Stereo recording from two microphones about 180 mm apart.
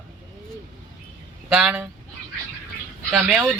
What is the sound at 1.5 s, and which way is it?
Speech, 5° right (ahead or behind).